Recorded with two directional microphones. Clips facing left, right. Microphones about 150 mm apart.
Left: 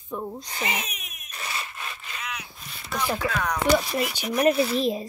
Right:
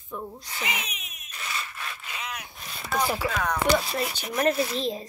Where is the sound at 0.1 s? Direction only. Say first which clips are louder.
Left 4 dB; 30° left (ahead or behind).